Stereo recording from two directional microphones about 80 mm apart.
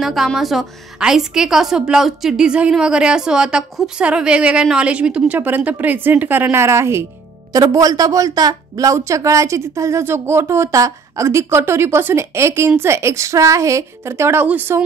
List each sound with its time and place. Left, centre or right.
0.0 s a woman's voice: centre; by 7.1 s right
7.5 s a woman's voice: right